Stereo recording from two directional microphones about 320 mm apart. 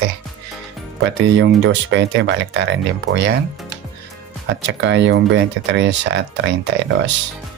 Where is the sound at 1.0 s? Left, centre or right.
Right.